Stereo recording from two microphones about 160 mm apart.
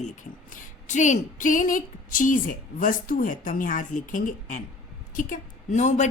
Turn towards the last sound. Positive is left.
turn(degrees=45)  # may be behind; listen again after turning